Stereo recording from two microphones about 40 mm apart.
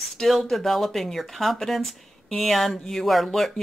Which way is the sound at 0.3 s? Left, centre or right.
Centre.